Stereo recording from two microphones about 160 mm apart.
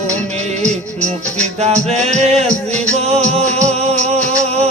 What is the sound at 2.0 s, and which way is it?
Music, 45° right (ahead or behind).